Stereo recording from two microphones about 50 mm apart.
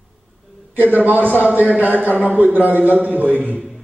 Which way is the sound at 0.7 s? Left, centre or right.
Right.